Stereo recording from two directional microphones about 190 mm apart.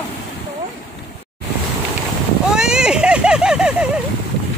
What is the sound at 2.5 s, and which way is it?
Vehicle, 5° right (ahead or behind).